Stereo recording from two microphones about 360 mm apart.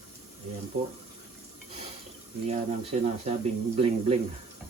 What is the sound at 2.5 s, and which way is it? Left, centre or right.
Speech, centre.